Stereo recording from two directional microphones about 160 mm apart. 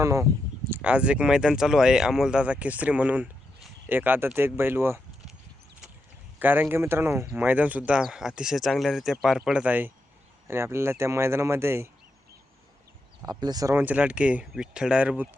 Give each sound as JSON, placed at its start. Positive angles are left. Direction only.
{"t": 0.0, "sound": "speech", "side_deg": -20}
{"t": 0.7, "sound": "speech", "side_deg": -5}
{"t": 6.4, "sound": "speech", "side_deg": -10}
{"t": 13.4, "sound": "speech", "side_deg": -25}